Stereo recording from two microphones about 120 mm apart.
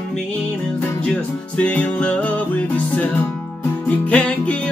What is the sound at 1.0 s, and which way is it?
Music, 10° left (ahead or behind).